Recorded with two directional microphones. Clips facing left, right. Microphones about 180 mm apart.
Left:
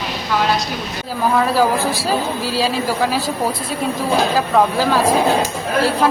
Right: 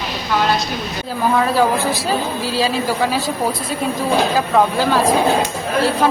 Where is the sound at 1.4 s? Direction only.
Centre (ahead or behind).